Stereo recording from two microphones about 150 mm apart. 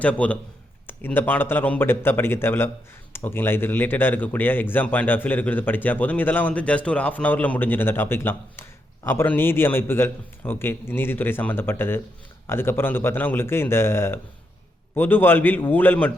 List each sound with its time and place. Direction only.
0.0 s a man's voice: 10° left (ahead or behind)